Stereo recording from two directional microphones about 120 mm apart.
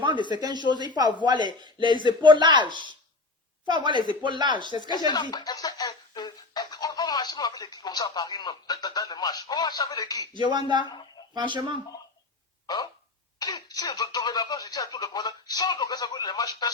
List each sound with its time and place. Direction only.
0.3 s speech: 35° right (ahead or behind)
4.7 s speech: 40° left (ahead or behind)
10.5 s speech: 40° right (ahead or behind)
12.6 s a sound: 35° left (ahead or behind)
13.4 s speech: 35° left (ahead or behind)